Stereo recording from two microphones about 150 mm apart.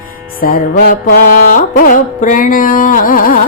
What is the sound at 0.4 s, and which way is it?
Music, 70° left (ahead or behind).